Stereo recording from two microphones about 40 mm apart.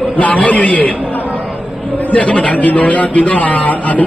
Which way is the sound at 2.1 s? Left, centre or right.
Left.